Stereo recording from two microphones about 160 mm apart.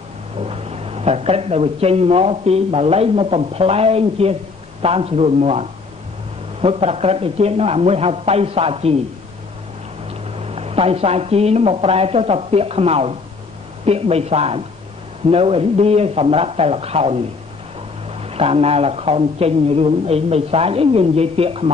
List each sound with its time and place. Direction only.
0.4 s speech: 40° right (ahead or behind)
10.0 s speech: 40° right (ahead or behind)
18.2 s speech: 40° right (ahead or behind)